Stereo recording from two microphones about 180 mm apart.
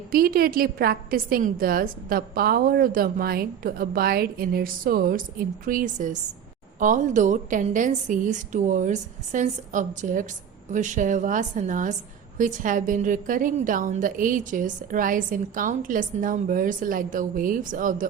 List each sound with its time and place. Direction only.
0.1 s a woman's voice: 55° right (ahead or behind)